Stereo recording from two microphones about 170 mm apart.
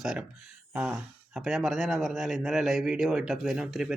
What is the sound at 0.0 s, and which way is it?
Speech, centre (ahead or behind).